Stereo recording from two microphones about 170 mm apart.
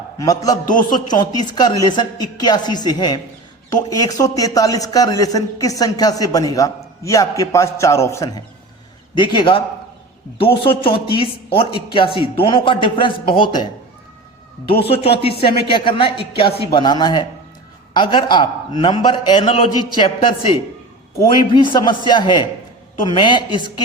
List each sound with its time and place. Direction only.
0.2 s a man's voice: 20° left (ahead or behind)
14.8 s a man's voice: 35° left (ahead or behind)